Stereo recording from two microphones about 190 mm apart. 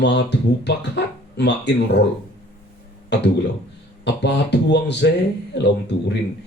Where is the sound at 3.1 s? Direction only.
65° left (ahead or behind).